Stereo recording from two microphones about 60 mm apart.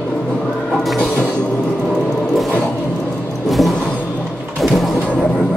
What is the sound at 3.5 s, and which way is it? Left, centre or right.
Music, centre.